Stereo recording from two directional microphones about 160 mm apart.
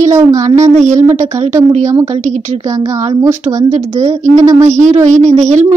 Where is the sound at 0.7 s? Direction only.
45° right (ahead or behind).